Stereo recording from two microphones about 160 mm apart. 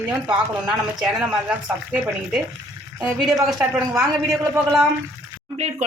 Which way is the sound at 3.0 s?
5° right (ahead or behind).